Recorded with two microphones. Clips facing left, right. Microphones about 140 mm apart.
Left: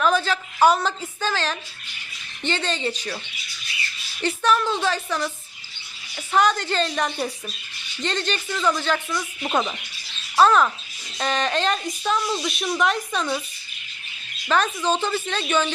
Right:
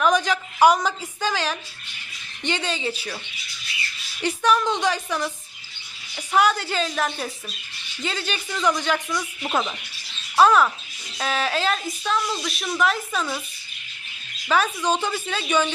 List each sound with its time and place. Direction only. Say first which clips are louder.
0.0 s a woman's voice: right 1 dB; 15° right (ahead or behind)
4.2 s a woman's voice: even; 10° right (ahead or behind)
9.1 s a woman's voice: left 1 dB; centre (ahead or behind)
14.5 s a woman's voice: even; 10° right (ahead or behind)